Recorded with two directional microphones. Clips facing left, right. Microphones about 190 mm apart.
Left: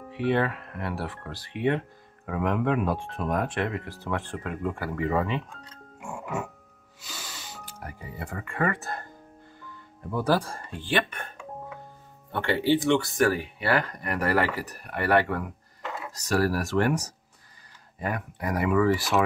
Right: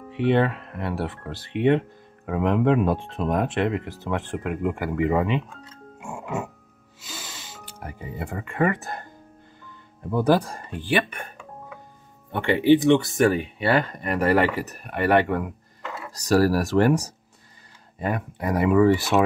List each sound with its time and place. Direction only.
0.2 s speech: 25° right (ahead or behind)
5.9 s music: 25° right (ahead or behind)
7.8 s speech: 20° right (ahead or behind)
10.1 s speech: 20° right (ahead or behind)
12.3 s speech: 15° right (ahead or behind)
16.1 s speech: 35° right (ahead or behind)